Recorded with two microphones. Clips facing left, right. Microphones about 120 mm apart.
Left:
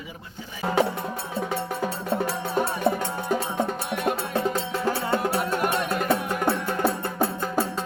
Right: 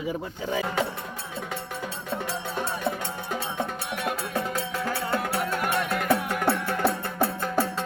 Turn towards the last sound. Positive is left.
turn(degrees=15)  # may be behind; listen again after turning